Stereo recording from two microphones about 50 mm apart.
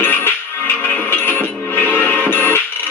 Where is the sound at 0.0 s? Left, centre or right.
Left.